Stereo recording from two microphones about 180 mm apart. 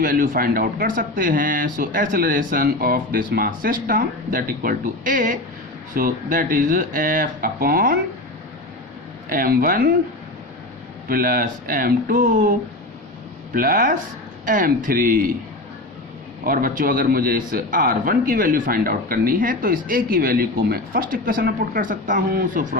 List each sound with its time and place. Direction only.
0.0 s a man's voice: 50° right (ahead or behind)
9.3 s a man's voice: 50° right (ahead or behind)
11.1 s a man's voice: 50° right (ahead or behind)
16.4 s a man's voice: 50° right (ahead or behind)